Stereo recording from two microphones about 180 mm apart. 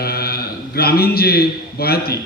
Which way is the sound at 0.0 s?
60° left (ahead or behind).